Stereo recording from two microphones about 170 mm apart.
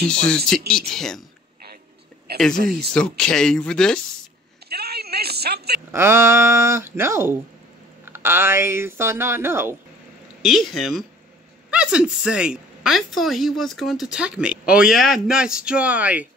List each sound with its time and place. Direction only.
0.1 s a woman's voice: 5° left (ahead or behind)
2.3 s speech: 70° right (ahead or behind)
2.9 s a woman's voice: 5° left (ahead or behind)
4.6 s a sound: 70° right (ahead or behind)
5.9 s speech: 15° right (ahead or behind)
10.4 s a woman's voice: centre (ahead or behind)